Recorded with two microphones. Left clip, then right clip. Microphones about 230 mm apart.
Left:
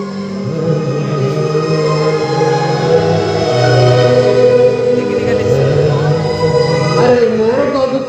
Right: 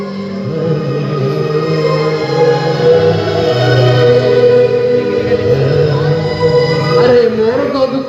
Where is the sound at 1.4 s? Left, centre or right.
Right.